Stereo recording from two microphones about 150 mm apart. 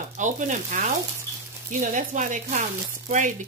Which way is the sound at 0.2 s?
55° right (ahead or behind).